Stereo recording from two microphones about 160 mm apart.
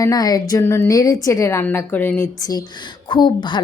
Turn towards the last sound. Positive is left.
turn(degrees=30)  # may be behind; listen again after turning